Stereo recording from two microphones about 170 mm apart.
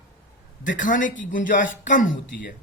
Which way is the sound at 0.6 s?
50° left (ahead or behind).